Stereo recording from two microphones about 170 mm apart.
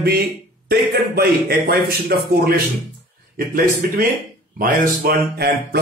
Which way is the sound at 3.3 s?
55° right (ahead or behind).